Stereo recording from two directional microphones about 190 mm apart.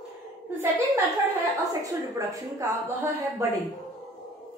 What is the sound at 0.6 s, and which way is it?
A woman's voice, 15° right (ahead or behind).